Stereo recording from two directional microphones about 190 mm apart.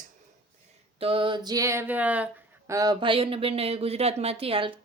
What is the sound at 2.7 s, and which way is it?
Speech, 20° right (ahead or behind).